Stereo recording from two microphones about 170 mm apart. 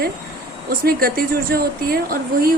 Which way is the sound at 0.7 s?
60° right (ahead or behind).